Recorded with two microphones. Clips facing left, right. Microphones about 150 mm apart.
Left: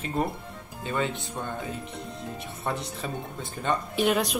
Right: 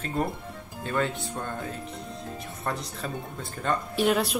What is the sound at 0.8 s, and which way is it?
Speech, 5° left (ahead or behind).